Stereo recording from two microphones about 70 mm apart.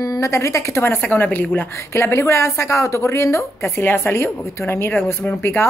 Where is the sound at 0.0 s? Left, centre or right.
Left.